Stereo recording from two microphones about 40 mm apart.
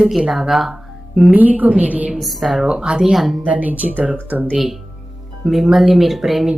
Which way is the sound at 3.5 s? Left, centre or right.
Right.